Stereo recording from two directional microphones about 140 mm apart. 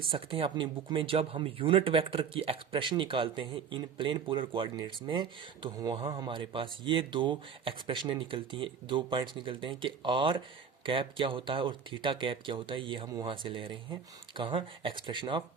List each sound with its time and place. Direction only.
0.0 s speech: 40° right (ahead or behind)